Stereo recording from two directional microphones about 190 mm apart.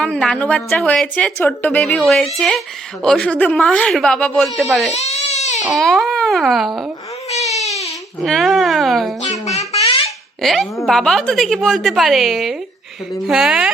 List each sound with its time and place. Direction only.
0.0 s a woman's voice: 5° left (ahead or behind)
4.9 s baby cry: 35° left (ahead or behind)
5.6 s a woman's voice: centre (ahead or behind)
7.3 s baby cry: 35° left (ahead or behind)
8.2 s a woman's voice: centre (ahead or behind)
9.2 s babbling: 35° left (ahead or behind)
10.4 s a woman's voice: centre (ahead or behind)